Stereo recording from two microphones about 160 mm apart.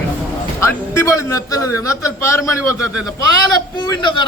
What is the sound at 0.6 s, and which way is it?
A man's voice, 15° left (ahead or behind).